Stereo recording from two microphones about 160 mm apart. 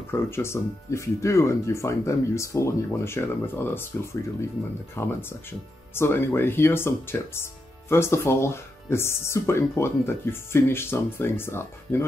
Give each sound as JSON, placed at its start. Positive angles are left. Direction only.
{"t": 0.1, "sound": "speech", "side_deg": 15}